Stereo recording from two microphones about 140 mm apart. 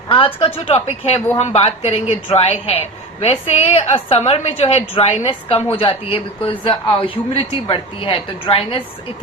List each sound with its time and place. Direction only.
0.1 s speech: 40° left (ahead or behind)